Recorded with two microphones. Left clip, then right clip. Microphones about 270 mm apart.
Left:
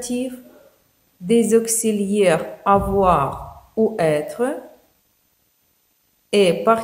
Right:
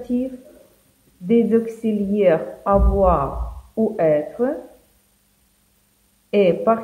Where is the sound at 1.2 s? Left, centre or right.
Left.